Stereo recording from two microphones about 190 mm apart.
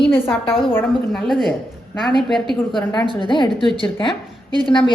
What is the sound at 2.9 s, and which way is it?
Speech, 25° left (ahead or behind).